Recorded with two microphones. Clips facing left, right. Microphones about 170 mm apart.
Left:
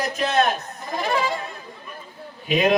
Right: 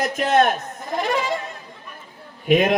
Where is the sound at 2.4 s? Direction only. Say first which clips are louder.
Right 3 dB; 50° right (ahead or behind).